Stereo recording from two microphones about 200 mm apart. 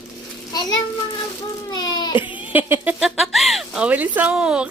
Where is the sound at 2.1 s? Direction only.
10° right (ahead or behind).